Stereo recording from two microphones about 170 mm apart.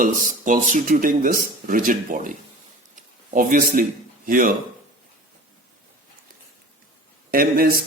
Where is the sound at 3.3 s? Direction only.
50° right (ahead or behind).